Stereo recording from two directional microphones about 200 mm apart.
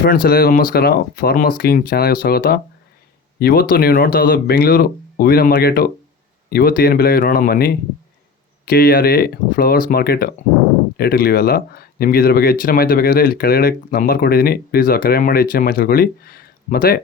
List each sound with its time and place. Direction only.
0.0 s speech: 45° left (ahead or behind)